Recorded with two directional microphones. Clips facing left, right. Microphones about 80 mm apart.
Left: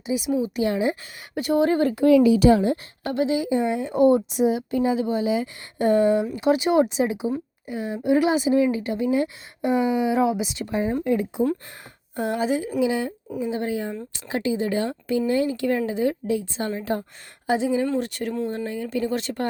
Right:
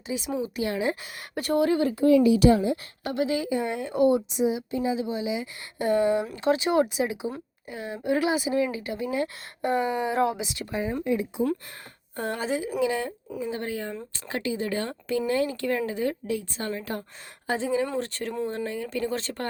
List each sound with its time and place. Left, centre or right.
0.4 s a woman's voice: left
1.6 s speech: left
1.9 s speech: left
3.0 s a woman's voice: left
4.3 s speech: left
5.8 s a woman's voice: left
6.3 s a woman's voice: centre
9.2 s speech: centre
10.4 s a woman's voice: left
11.0 s speech: left
12.1 s speech: centre
15.9 s a woman's voice: centre